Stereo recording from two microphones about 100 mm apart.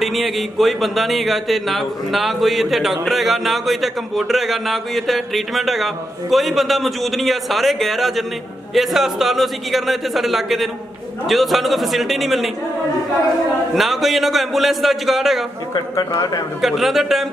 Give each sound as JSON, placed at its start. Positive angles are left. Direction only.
{"t": 0.0, "sound": "speech", "side_deg": 0}
{"t": 13.7, "sound": "speech", "side_deg": 0}
{"t": 15.7, "sound": "speech", "side_deg": 35}
{"t": 16.6, "sound": "speech", "side_deg": 0}